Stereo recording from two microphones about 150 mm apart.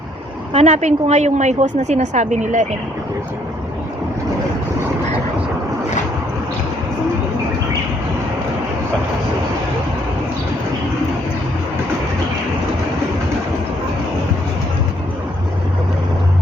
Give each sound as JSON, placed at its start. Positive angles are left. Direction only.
{"t": 0.5, "sound": "a woman's voice", "side_deg": -50}